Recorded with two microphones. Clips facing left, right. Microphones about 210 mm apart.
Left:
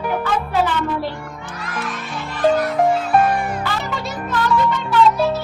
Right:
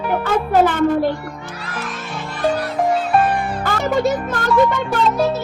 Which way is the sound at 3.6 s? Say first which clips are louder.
Right 8 dB; 45° right (ahead or behind).